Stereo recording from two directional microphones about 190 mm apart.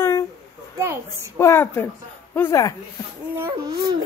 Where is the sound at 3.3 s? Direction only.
15° right (ahead or behind).